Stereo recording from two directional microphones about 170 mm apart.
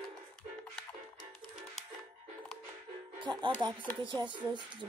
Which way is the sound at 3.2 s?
25° right (ahead or behind).